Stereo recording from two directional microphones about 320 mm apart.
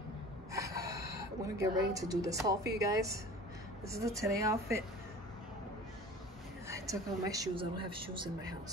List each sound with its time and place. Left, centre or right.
0.5 s snort: centre
1.6 s a woman's voice: centre
6.7 s a woman's voice: centre